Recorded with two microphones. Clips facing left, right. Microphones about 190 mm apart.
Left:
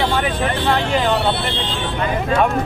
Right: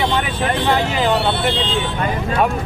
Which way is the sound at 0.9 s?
5° right (ahead or behind).